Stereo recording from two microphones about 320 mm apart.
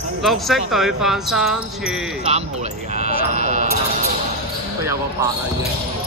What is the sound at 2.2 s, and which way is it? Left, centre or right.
Speech, centre.